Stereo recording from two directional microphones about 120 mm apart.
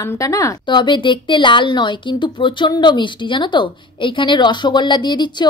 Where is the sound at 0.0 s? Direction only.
25° left (ahead or behind).